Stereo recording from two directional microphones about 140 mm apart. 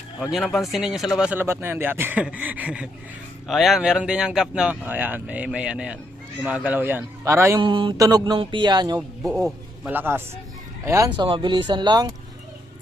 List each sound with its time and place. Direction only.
0.2 s speech: centre (ahead or behind); by 7.6 s 20° right (ahead or behind)
7.6 s speech: 35° right (ahead or behind)
7.9 s speech: 25° right (ahead or behind)
9.4 s a man's voice: 15° right (ahead or behind)
11.2 s speech: 35° right (ahead or behind)